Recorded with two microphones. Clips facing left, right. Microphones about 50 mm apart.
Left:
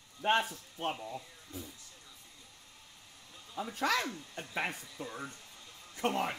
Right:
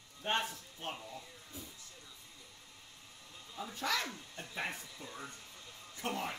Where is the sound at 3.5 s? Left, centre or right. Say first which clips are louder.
Left 5 dB; left.